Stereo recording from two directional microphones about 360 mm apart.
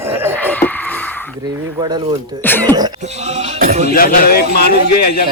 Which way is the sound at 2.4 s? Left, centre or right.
Centre.